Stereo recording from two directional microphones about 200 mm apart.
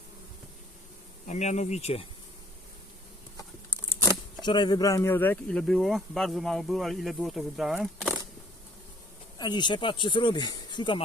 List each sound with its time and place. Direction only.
1.3 s speech: 35° left (ahead or behind)
4.4 s speech: 20° left (ahead or behind); by 8.1 s centre (ahead or behind)
9.4 s speech: 20° left (ahead or behind)